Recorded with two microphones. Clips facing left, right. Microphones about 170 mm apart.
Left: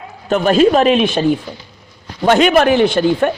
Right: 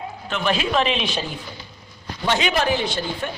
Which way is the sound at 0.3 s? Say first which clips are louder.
Left 12 dB; 45° left (ahead or behind).